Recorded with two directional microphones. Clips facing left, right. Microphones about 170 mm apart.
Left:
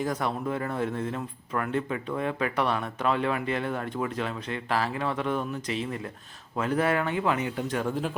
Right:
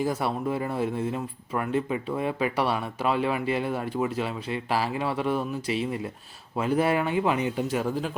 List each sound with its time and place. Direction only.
0.0 s speech: 10° right (ahead or behind)
7.7 s speech: 5° right (ahead or behind)